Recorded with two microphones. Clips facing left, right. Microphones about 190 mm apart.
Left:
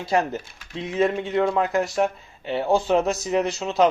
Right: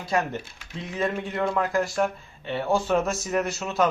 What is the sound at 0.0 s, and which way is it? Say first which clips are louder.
Speech: left 3 dB; 25° left (ahead or behind).